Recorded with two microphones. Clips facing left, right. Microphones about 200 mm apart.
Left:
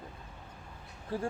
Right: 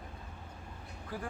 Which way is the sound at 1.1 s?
30° left (ahead or behind).